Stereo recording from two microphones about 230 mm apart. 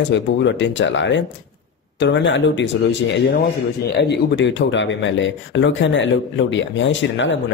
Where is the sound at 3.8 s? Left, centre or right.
Left.